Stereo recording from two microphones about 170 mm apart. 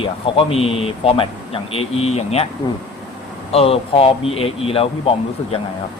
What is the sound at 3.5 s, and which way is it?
Speech, 35° left (ahead or behind).